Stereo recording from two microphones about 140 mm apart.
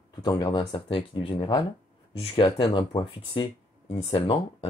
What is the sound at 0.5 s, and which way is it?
Speech, 40° left (ahead or behind).